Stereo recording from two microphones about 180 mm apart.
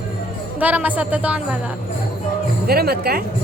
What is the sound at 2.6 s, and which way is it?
Speech, 60° right (ahead or behind).